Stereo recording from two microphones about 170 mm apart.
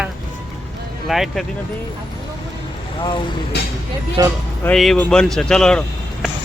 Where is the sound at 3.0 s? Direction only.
25° left (ahead or behind).